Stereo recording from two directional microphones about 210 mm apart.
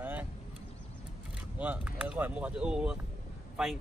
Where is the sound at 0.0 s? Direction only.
10° right (ahead or behind).